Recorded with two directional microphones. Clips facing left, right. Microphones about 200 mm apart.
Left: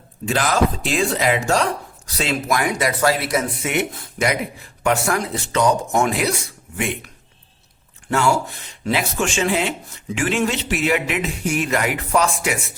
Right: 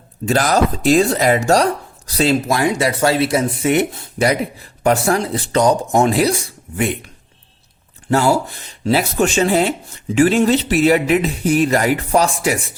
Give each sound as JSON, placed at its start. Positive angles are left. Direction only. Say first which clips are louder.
{"t": 0.3, "sound": "speech", "louder": "right 3 dB", "side_deg": -40}
{"t": 8.1, "sound": "speech", "louder": "right 4 dB", "side_deg": -35}